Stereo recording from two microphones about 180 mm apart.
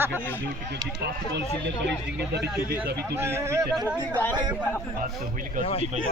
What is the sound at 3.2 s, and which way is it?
Speech, 15° right (ahead or behind).